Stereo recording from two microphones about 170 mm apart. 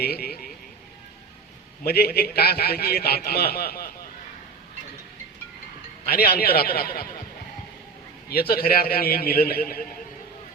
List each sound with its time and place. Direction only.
0.0 s a man's voice: 65° left (ahead or behind)
1.8 s a man's voice: 65° left (ahead or behind)
6.1 s a man's voice: 60° left (ahead or behind)
8.3 s a man's voice: 65° left (ahead or behind)